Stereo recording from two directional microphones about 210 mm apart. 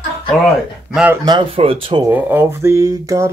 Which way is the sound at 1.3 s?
25° right (ahead or behind).